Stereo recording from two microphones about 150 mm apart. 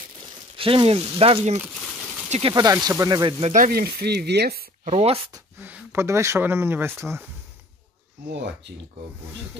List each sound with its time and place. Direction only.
0.6 s speech: 35° right (ahead or behind)
2.2 s a sound: 50° right (ahead or behind)
2.5 s speech: 25° right (ahead or behind)
3.5 s speech: 70° right (ahead or behind); by 4.6 s 90° right
4.8 s speech: 45° right (ahead or behind)
5.6 s speech: 10° right (ahead or behind)